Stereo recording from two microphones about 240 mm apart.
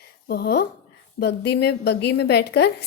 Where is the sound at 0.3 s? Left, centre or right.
Left.